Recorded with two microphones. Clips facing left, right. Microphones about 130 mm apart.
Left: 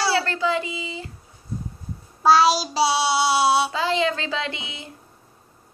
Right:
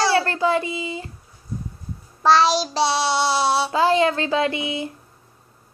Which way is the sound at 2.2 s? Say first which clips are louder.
Even; 5° left (ahead or behind).